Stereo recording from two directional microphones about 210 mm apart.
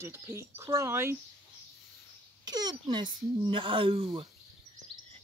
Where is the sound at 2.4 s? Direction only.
20° right (ahead or behind).